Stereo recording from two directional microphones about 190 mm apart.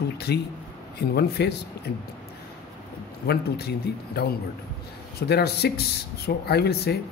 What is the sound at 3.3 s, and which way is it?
Speech, 55° left (ahead or behind).